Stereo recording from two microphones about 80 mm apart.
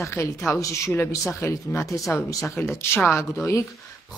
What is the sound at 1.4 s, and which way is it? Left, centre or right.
A woman's voice, left.